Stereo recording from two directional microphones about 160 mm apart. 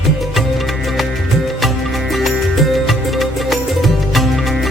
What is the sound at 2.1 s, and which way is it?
Music, centre (ahead or behind).